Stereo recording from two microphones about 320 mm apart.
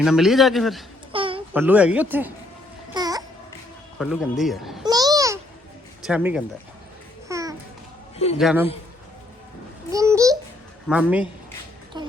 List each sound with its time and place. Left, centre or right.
0.0 s a man's voice: centre
1.1 s a sound: centre
1.6 s a man's voice: centre
2.9 s babbling: centre
3.9 s a man's voice: centre
4.8 s babbling: centre
6.0 s speech: centre
7.3 s babbling: centre
8.4 s a man's voice: centre
9.9 s babbling: centre
10.8 s a man's voice: centre
11.9 s a sound: centre